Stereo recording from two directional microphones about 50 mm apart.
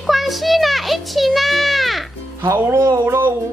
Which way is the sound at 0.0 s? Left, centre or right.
Centre.